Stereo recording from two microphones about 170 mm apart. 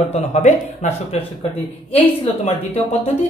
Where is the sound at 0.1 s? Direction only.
40° left (ahead or behind).